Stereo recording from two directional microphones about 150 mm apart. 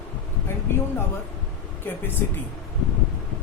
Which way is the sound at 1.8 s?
15° left (ahead or behind).